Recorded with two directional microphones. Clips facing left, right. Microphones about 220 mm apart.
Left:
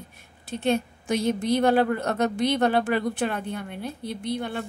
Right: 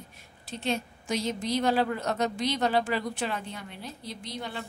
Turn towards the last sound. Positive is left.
turn(degrees=55)  # may be behind; listen again after turning